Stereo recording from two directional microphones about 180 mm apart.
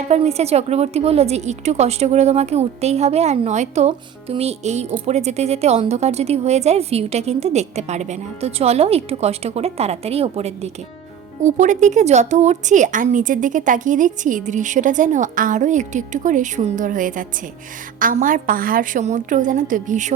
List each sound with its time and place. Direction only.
0.1 s a woman's voice: 35° right (ahead or behind)